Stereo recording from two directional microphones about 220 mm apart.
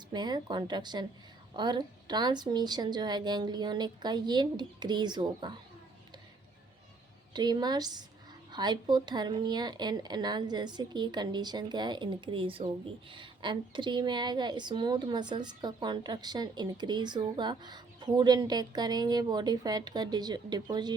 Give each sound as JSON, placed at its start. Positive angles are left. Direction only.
{"t": 0.1, "sound": "speech", "side_deg": -20}
{"t": 7.3, "sound": "speech", "side_deg": -20}